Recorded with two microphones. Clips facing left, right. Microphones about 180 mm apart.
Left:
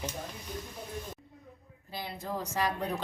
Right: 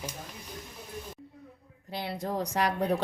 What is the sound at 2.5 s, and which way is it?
Speech, 65° right (ahead or behind).